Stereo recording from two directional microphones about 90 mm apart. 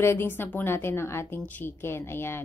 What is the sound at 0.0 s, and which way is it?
A woman's voice, 30° left (ahead or behind).